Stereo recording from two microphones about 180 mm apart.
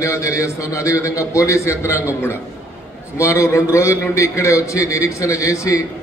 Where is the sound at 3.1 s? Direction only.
15° left (ahead or behind).